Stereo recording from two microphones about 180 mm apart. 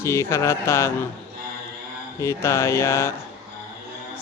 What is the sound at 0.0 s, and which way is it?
Speech, 15° left (ahead or behind).